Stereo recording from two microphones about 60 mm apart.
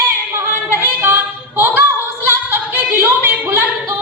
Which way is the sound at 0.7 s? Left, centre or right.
Right.